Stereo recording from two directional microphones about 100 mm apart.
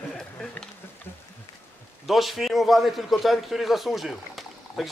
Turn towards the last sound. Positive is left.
turn(degrees=0)  # may be behind; listen again after turning